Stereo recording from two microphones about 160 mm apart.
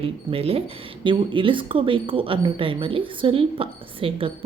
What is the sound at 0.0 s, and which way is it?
Speech, 35° right (ahead or behind).